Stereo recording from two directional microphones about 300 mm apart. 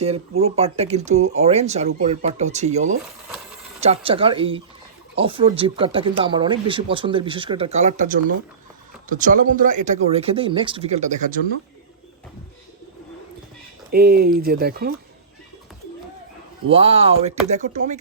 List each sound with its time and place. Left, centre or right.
0.0 s speech: right
13.9 s speech: right
16.6 s speech: centre